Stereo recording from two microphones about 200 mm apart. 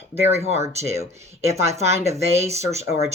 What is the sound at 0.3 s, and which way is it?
Speech, 30° right (ahead or behind).